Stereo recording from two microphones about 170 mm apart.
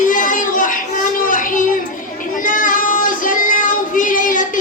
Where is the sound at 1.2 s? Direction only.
50° left (ahead or behind).